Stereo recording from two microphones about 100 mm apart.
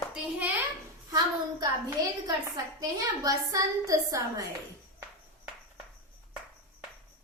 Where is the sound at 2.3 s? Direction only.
40° right (ahead or behind).